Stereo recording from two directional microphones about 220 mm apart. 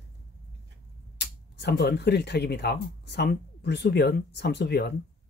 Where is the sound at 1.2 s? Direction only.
50° left (ahead or behind).